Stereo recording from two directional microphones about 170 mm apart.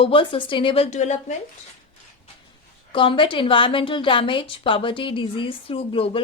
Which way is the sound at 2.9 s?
30° left (ahead or behind).